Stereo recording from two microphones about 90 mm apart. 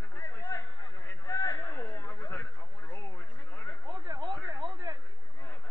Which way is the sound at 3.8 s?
60° right (ahead or behind).